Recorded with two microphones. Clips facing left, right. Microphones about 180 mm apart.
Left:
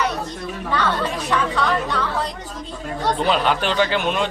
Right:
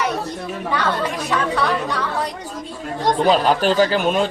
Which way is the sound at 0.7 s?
10° right (ahead or behind).